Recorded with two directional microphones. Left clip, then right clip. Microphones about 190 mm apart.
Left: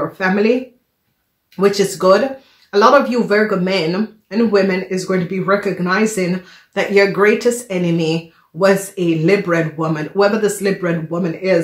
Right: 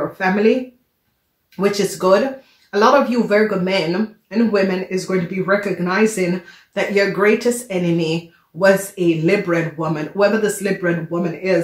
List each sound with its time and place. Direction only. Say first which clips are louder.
0.2 s speech: left 1 dB; 35° left (ahead or behind)
1.6 s speech: left 4 dB; 35° left (ahead or behind)